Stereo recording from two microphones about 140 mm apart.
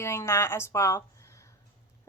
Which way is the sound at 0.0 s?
20° left (ahead or behind).